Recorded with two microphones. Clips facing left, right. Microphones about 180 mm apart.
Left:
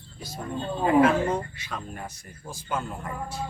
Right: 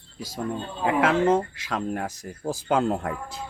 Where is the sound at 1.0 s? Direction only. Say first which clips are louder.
Right 1 dB; 90° right.